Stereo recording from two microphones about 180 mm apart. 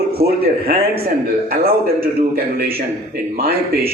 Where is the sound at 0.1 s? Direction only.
60° right (ahead or behind).